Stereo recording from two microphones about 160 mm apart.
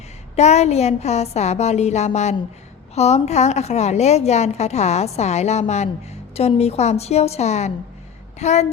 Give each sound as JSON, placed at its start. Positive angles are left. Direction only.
{"t": 0.3, "sound": "a woman's voice", "side_deg": 45}